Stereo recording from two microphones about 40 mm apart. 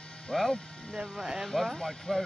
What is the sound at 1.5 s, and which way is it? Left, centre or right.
Speech, centre.